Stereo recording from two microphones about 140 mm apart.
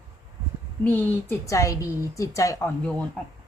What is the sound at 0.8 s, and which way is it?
A woman's voice, 10° left (ahead or behind).